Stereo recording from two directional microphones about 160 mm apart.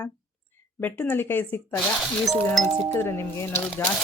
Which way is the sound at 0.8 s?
10° left (ahead or behind).